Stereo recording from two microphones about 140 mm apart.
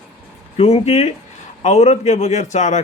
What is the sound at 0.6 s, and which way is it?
Speech, 50° left (ahead or behind).